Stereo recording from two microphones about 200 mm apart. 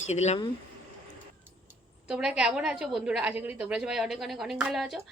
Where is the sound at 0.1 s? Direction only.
35° left (ahead or behind).